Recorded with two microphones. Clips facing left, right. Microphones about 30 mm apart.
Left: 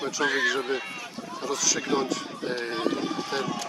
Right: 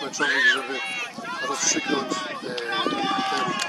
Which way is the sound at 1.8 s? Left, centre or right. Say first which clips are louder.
Right 1 dB; right.